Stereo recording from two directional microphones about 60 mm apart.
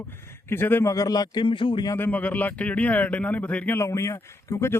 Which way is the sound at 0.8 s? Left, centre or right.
Left.